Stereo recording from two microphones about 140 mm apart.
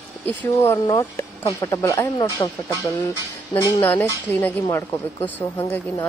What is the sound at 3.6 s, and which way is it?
Speech, 15° left (ahead or behind).